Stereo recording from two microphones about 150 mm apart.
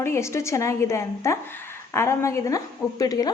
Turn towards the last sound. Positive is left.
turn(degrees=25)  # may be behind; listen again after turning